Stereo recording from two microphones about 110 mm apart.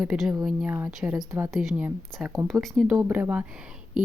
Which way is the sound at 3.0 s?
15° right (ahead or behind).